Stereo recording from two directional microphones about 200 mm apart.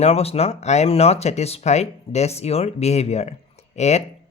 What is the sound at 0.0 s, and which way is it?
Speech, 30° left (ahead or behind).